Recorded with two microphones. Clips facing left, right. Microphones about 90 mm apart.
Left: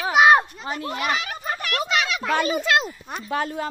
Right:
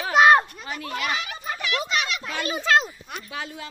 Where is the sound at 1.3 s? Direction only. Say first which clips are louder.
Left 1 dB; 50° left (ahead or behind).